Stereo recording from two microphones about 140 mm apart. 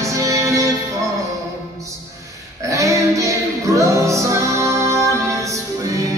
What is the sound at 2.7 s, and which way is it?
Child singing, 20° right (ahead or behind).